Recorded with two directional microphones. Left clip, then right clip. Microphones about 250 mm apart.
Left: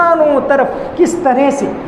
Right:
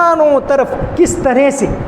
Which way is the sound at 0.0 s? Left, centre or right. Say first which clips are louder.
Even; right.